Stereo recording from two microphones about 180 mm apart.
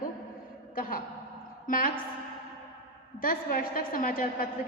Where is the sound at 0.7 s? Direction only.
50° left (ahead or behind).